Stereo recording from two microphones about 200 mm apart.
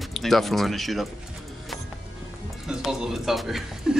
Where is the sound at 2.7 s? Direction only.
Centre (ahead or behind).